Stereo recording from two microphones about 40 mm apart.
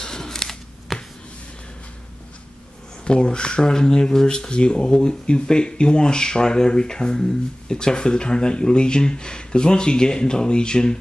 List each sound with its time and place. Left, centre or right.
0.0 s a sound: centre
0.9 s finger snapping: centre
3.1 s speech: left